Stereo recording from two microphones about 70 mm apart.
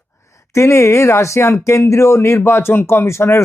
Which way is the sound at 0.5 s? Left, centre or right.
Left.